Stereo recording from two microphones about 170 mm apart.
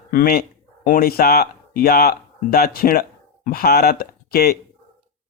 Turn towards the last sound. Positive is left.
turn(degrees=65)  # may be behind; listen again after turning